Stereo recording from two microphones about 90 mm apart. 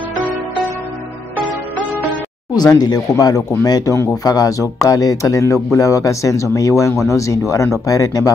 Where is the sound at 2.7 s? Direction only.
45° left (ahead or behind).